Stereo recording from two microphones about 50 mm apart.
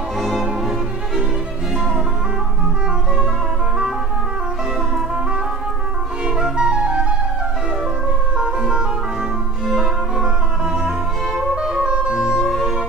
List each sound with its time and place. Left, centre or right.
0.2 s music: centre
6.2 s flute: centre
8.4 s music: centre
10.2 s music: centre
12.4 s music: centre